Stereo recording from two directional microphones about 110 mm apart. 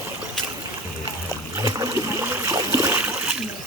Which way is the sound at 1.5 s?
30° right (ahead or behind).